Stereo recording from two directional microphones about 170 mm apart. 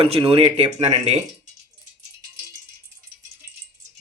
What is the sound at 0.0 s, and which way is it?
Speech, 35° right (ahead or behind).